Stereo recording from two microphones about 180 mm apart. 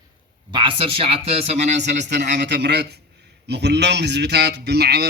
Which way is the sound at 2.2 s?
75° right (ahead or behind).